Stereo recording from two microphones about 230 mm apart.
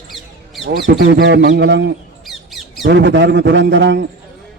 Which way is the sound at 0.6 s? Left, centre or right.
Right.